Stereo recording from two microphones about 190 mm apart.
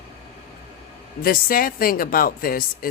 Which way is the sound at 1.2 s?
50° left (ahead or behind).